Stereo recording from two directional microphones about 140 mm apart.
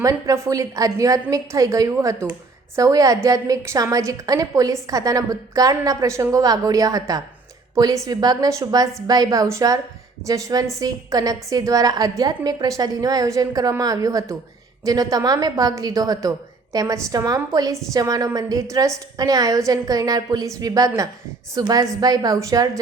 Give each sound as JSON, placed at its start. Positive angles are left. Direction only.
{"t": 0.0, "sound": "a woman's voice", "side_deg": -20}